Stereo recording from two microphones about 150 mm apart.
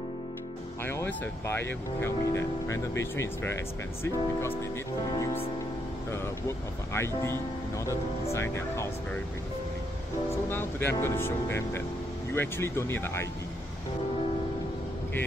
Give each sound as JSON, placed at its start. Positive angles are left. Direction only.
{"t": 0.8, "sound": "speech", "side_deg": 15}
{"t": 6.9, "sound": "speech", "side_deg": 15}
{"t": 10.3, "sound": "speech", "side_deg": 15}